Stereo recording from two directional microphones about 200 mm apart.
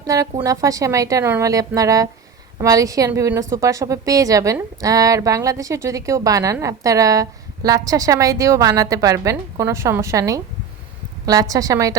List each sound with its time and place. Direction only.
0.0 s a woman's voice: 20° right (ahead or behind)